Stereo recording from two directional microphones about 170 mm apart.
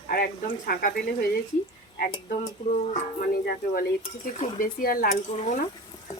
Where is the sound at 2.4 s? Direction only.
45° left (ahead or behind).